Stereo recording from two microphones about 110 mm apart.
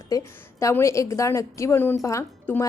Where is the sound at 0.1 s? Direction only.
30° left (ahead or behind).